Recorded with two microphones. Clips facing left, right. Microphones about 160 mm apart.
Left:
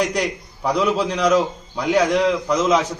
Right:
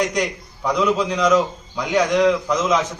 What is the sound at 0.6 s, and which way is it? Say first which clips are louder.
A man's voice: even; 30° left (ahead or behind).